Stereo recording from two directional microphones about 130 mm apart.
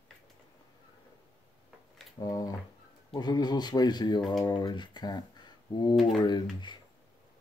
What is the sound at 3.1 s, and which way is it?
Speech, 30° left (ahead or behind).